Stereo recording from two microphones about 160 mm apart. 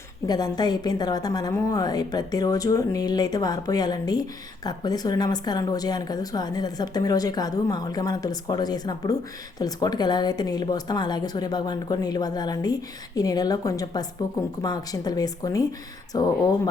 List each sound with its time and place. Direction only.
0.3 s a woman's voice: 25° left (ahead or behind)